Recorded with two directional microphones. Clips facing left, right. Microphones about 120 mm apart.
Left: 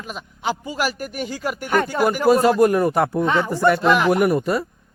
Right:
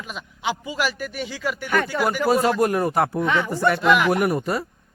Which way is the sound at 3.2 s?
35° left (ahead or behind).